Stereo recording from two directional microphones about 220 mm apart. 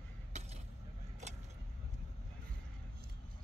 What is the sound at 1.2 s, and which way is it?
Vehicle, 30° right (ahead or behind).